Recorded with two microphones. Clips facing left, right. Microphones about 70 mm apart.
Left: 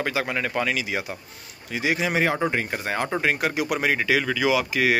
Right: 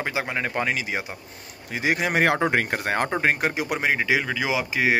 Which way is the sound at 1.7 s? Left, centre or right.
Right.